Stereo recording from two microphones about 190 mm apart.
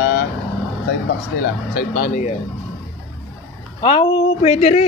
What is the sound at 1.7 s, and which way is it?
Speech, 45° left (ahead or behind).